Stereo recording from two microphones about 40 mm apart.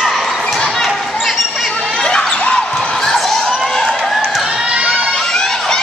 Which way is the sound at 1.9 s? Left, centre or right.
Centre.